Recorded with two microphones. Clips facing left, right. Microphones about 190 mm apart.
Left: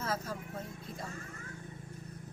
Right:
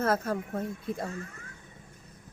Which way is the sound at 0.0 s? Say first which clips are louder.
Right 9 dB; 60° right (ahead or behind).